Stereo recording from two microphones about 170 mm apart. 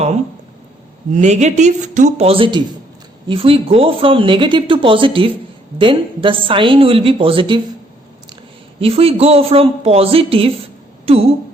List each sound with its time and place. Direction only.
1.1 s speech: 45° right (ahead or behind)
8.8 s speech: 35° right (ahead or behind)